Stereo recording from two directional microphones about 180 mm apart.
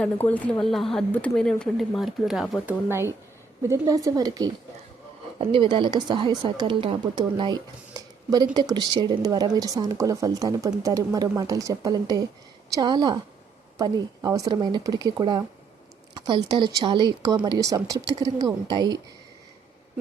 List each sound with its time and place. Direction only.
0.0 s speech: 10° left (ahead or behind)
3.7 s speech: 20° right (ahead or behind)